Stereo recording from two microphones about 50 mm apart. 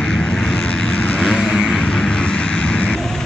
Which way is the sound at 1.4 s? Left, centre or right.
Centre.